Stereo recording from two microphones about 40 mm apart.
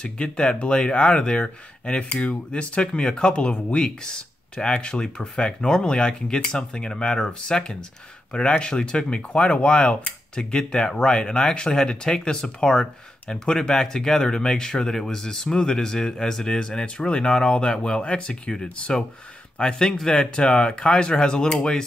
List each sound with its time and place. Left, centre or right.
0.0 s speech: left